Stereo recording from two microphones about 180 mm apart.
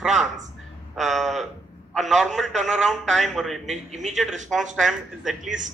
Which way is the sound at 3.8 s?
40° right (ahead or behind).